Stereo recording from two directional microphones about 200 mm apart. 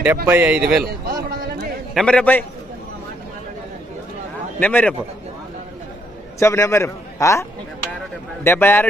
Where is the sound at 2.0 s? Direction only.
5° left (ahead or behind).